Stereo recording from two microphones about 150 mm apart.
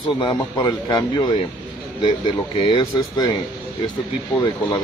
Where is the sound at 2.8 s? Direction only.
25° left (ahead or behind).